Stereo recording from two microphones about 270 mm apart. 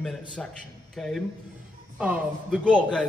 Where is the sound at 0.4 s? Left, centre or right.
Centre.